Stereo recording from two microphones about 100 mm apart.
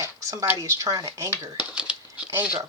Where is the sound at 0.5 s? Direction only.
30° right (ahead or behind).